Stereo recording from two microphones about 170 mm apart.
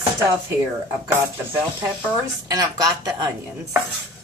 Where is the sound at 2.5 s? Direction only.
20° right (ahead or behind).